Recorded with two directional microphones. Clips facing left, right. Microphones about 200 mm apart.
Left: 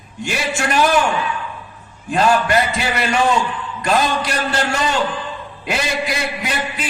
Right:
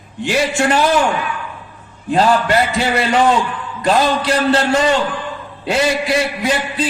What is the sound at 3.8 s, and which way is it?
A man's voice, 30° right (ahead or behind).